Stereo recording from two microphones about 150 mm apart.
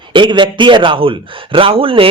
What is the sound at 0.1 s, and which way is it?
A man's voice, 30° right (ahead or behind).